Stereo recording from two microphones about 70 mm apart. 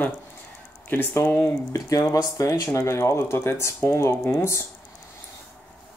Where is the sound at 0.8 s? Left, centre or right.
Left.